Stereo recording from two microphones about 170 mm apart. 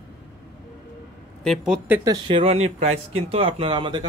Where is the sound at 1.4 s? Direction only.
Centre (ahead or behind).